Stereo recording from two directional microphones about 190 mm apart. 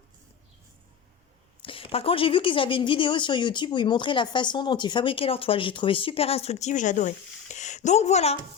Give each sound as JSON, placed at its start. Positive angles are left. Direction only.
{"t": 1.6, "sound": "speech", "side_deg": 30}